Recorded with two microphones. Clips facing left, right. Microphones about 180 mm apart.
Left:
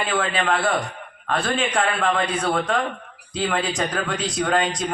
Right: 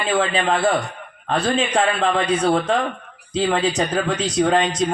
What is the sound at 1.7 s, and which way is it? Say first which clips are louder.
A man's voice: right 3 dB; 25° right (ahead or behind).